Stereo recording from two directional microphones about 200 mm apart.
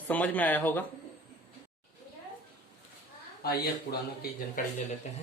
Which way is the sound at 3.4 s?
50° left (ahead or behind).